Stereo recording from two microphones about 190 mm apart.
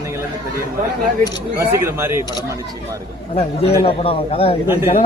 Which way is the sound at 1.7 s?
15° right (ahead or behind).